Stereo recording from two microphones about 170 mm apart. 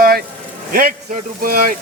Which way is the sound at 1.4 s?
60° right (ahead or behind).